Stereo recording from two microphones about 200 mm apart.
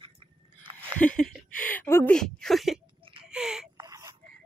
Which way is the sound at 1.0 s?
5° left (ahead or behind).